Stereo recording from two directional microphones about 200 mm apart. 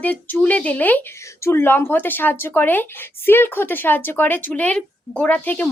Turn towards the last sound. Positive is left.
turn(degrees=10)  # may be behind; listen again after turning